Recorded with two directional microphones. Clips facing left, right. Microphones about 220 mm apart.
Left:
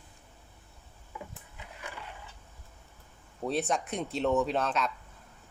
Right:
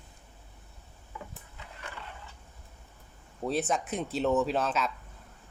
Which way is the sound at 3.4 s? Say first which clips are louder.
Right 1 dB; centre (ahead or behind).